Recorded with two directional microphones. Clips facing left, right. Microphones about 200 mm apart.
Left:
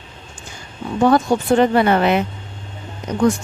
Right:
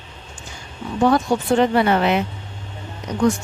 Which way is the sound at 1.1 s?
50° left (ahead or behind).